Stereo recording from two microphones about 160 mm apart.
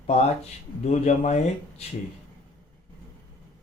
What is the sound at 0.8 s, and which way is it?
Speech, 45° left (ahead or behind).